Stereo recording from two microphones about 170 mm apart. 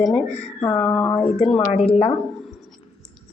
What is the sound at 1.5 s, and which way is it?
Speech, 35° left (ahead or behind).